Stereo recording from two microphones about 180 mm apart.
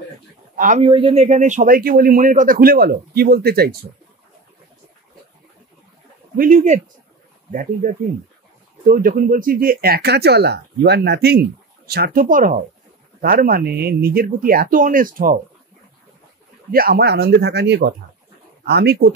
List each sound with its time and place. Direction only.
0.6 s speech: 45° right (ahead or behind)
0.8 s speech: 30° right (ahead or behind); by 3.7 s 60° right (ahead or behind)
6.3 s speech: 45° right (ahead or behind)
7.8 s speech: 50° right (ahead or behind)
16.7 s speech: 55° right (ahead or behind)